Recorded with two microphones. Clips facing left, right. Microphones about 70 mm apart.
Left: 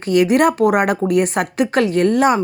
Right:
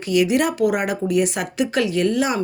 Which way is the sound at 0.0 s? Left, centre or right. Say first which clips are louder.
Left 5 dB; left.